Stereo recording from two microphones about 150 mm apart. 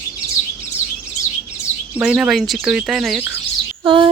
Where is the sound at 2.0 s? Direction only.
5° right (ahead or behind).